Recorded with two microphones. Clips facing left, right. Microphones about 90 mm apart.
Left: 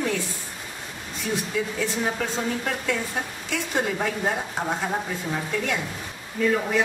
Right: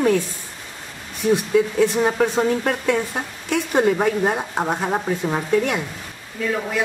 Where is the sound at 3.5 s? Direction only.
60° right (ahead or behind).